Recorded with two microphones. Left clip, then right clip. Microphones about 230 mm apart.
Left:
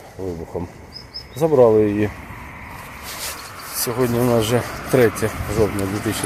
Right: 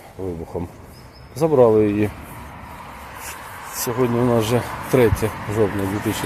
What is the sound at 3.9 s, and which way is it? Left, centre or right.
Speech, centre.